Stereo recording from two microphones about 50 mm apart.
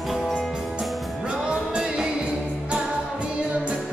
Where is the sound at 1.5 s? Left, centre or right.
Centre.